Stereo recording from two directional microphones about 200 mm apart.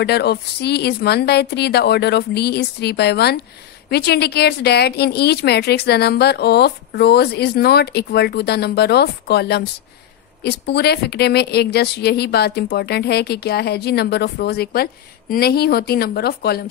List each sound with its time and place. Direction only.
0.0 s a woman's voice: 55° left (ahead or behind)